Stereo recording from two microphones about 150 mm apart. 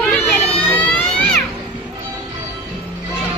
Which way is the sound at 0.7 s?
10° left (ahead or behind).